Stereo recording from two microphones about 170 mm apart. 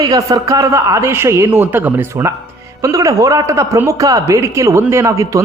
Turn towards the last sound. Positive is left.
turn(degrees=-20)  # may be behind; listen again after turning